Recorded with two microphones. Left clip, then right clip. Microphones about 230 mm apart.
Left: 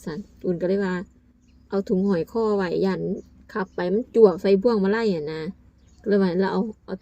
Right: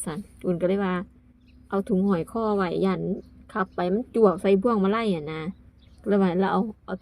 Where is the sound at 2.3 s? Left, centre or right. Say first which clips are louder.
Left 4 dB; right.